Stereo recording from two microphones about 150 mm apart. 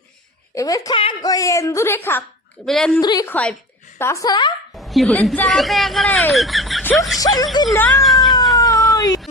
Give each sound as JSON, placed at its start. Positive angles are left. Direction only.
{"t": 0.5, "sound": "a woman's voice", "side_deg": 20}
{"t": 2.6, "sound": "a woman's voice", "side_deg": 5}
{"t": 3.0, "sound": "a woman's voice", "side_deg": 30}
{"t": 3.2, "sound": "a woman's voice", "side_deg": 10}
{"t": 4.7, "sound": "a woman's voice", "side_deg": 0}
{"t": 7.2, "sound": "a woman's voice", "side_deg": 25}
{"t": 8.0, "sound": "cat", "side_deg": 0}
{"t": 8.5, "sound": "cat", "side_deg": 20}
{"t": 9.0, "sound": "a sound", "side_deg": 25}